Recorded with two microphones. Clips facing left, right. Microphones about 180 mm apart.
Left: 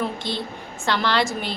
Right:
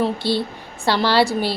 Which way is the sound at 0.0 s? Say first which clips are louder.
Right 6 dB; 35° right (ahead or behind).